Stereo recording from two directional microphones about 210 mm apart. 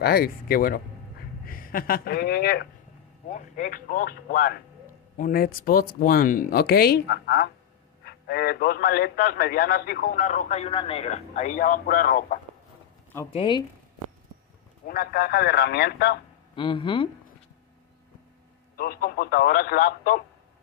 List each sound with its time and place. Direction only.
0.0 s a man's voice: 45° left (ahead or behind)
3.3 s a man's voice: 35° left (ahead or behind)
13.3 s speech: 25° left (ahead or behind)
14.9 s a man's voice: 45° left (ahead or behind)
16.5 s speech: 25° left (ahead or behind)
18.8 s a man's voice: 45° left (ahead or behind)